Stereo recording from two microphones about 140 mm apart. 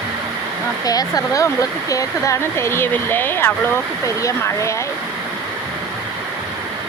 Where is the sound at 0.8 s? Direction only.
25° left (ahead or behind).